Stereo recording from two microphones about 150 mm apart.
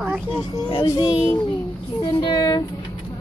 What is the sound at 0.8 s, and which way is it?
A woman's voice, 25° left (ahead or behind).